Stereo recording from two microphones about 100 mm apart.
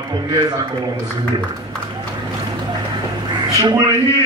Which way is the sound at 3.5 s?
45° right (ahead or behind).